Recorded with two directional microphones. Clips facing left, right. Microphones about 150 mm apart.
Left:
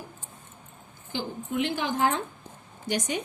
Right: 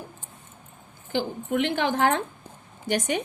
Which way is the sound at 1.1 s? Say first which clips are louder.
Right 5 dB; 60° right (ahead or behind).